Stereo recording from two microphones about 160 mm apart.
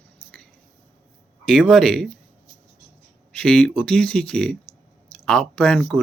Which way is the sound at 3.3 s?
5° left (ahead or behind).